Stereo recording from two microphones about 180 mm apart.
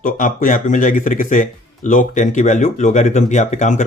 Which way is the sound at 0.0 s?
50° left (ahead or behind).